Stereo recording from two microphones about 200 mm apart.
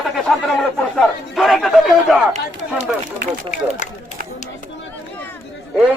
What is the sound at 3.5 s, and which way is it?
Speech, 35° left (ahead or behind).